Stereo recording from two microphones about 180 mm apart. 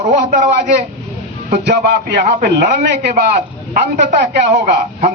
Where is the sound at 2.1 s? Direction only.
60° right (ahead or behind).